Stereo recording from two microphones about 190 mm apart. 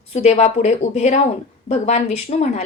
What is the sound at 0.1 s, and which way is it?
A woman's voice, 35° left (ahead or behind).